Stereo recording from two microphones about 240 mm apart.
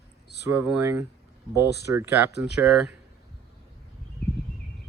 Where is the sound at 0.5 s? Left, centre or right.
Centre.